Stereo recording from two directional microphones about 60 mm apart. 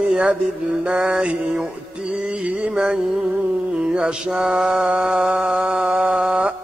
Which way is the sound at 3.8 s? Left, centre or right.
Centre.